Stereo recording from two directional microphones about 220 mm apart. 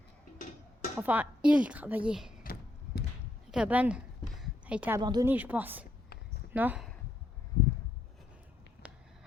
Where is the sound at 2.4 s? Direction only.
45° left (ahead or behind).